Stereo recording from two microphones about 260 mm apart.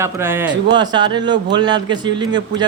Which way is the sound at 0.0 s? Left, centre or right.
Centre.